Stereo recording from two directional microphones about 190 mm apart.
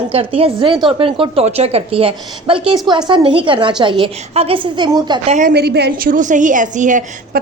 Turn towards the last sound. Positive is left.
turn(degrees=-40)  # may be behind; listen again after turning